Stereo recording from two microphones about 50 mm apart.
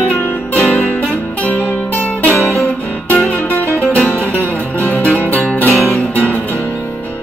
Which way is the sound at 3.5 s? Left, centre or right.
Left.